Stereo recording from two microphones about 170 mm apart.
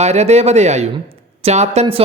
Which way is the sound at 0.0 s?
40° right (ahead or behind).